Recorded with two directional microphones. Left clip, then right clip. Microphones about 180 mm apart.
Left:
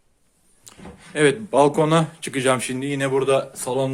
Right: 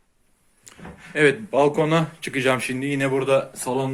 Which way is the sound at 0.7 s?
5° left (ahead or behind).